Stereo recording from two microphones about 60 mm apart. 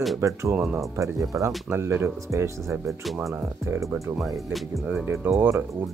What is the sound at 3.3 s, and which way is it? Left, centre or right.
Speech, right.